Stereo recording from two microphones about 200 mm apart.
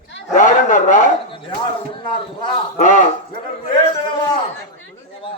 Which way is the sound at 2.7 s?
40° left (ahead or behind).